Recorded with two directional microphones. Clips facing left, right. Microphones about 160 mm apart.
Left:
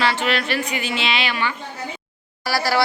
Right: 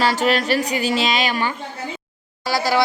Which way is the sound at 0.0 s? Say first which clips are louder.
Right 3 dB; 40° right (ahead or behind).